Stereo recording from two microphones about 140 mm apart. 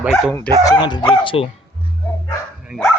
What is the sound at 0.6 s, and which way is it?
Speech, 30° left (ahead or behind).